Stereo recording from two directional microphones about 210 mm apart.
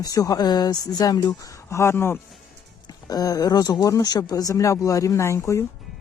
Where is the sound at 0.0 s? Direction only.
15° left (ahead or behind).